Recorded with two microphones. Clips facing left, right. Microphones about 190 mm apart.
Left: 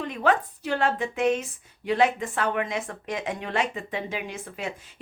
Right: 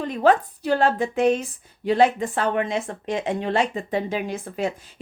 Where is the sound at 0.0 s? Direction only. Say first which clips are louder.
Right 5 dB; 35° right (ahead or behind).